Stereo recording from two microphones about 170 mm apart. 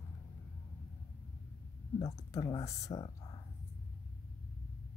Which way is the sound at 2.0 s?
20° left (ahead or behind).